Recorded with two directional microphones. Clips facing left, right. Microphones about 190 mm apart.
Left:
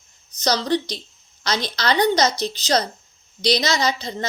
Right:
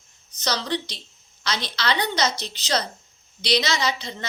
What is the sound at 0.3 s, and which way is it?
A woman's voice, 40° left (ahead or behind).